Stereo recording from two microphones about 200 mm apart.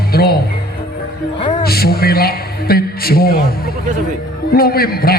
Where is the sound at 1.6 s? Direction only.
50° left (ahead or behind).